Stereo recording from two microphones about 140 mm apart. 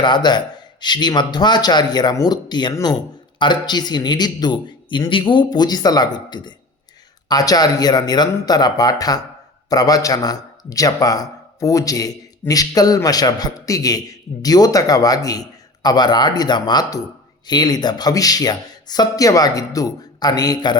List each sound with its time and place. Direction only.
0.0 s a man's voice: 30° left (ahead or behind)